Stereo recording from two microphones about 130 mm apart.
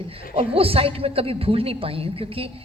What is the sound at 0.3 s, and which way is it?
A woman's voice, 45° right (ahead or behind).